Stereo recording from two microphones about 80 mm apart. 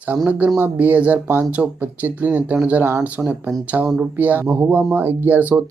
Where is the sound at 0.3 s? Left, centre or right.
Centre.